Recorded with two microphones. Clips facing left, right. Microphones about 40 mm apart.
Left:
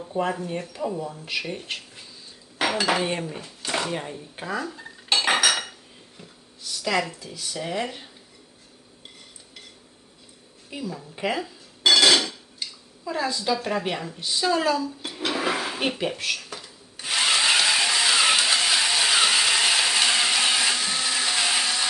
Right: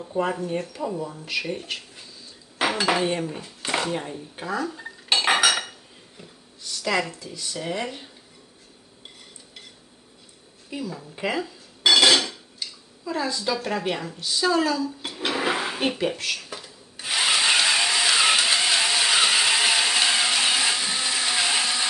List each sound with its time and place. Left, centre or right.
0.0 s speech: centre
2.6 s dishes: centre
3.1 s speech: centre
5.1 s cutlery: centre
6.7 s a sound: centre
7.1 s speech: centre
10.7 s speech: centre
11.9 s dishes: centre
13.1 s a woman's voice: centre
14.2 s a woman's voice: centre
14.8 s speech: centre
15.2 s a sound: centre